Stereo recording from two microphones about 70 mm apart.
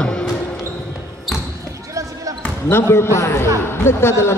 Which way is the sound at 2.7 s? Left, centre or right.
Left.